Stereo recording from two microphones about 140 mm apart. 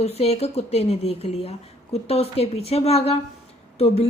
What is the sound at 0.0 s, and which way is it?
A woman's voice, 50° left (ahead or behind).